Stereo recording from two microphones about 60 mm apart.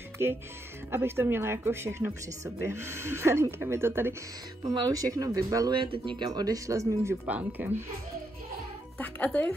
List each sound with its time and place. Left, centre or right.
0.2 s speech: right
4.6 s speech: right
6.4 s speech: right
7.2 s speech: right
9.0 s speech: left